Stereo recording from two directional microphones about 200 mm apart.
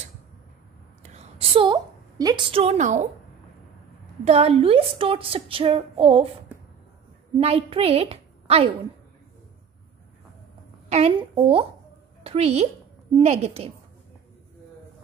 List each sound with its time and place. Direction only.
1.0 s a woman's voice: 30° right (ahead or behind)
4.2 s a woman's voice: 30° right (ahead or behind)
7.3 s a woman's voice: 30° right (ahead or behind)
10.9 s a woman's voice: 30° right (ahead or behind)